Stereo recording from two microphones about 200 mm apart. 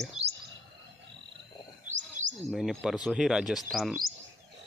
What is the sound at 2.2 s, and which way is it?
Bird, 40° right (ahead or behind).